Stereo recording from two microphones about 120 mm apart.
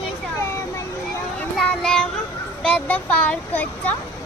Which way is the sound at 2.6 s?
10° left (ahead or behind).